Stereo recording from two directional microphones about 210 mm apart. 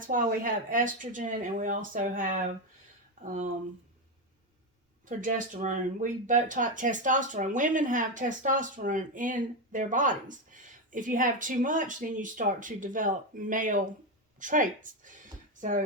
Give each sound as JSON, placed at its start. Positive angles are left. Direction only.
{"t": 0.0, "sound": "speech", "side_deg": -40}
{"t": 5.0, "sound": "speech", "side_deg": -40}